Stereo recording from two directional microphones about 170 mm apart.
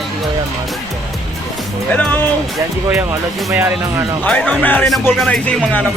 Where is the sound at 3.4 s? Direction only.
15° right (ahead or behind).